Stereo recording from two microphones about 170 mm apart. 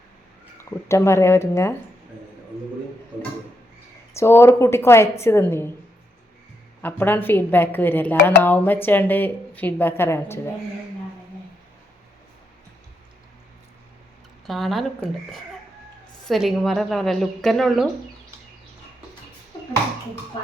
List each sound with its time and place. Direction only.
0.6 s a woman's voice: 15° left (ahead or behind)
4.1 s a woman's voice: 15° left (ahead or behind)
6.8 s a woman's voice: 10° left (ahead or behind)
14.4 s speech: centre (ahead or behind)
16.2 s a woman's voice: centre (ahead or behind)